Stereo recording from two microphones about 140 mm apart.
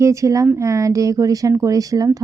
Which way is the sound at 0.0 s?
20° right (ahead or behind).